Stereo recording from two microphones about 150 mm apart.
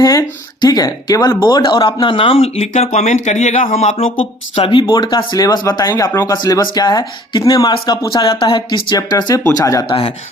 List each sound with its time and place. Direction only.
0.0 s speech: 25° left (ahead or behind)